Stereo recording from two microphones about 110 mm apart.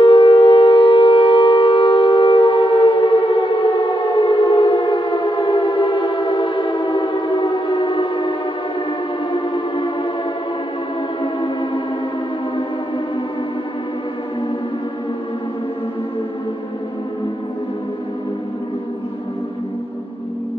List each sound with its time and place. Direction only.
0.0 s civil defense siren: 45° left (ahead or behind)